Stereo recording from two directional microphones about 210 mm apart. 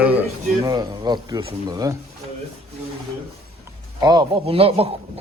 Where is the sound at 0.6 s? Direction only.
15° right (ahead or behind).